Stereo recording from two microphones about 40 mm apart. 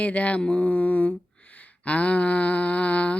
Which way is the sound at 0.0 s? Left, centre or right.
Left.